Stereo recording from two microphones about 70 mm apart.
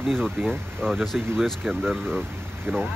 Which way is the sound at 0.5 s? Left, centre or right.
Centre.